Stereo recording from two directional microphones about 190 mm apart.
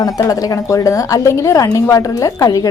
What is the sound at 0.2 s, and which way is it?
A woman's voice, 20° left (ahead or behind).